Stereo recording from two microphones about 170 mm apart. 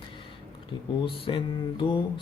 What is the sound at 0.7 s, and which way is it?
Speech, 25° left (ahead or behind).